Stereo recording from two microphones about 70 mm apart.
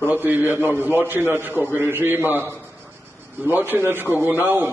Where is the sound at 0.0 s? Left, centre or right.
Right.